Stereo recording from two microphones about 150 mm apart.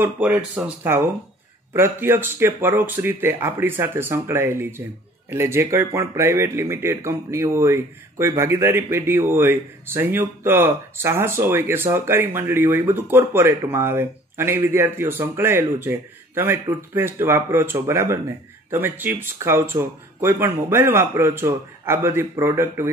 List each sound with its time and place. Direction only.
0.0 s speech: 10° right (ahead or behind)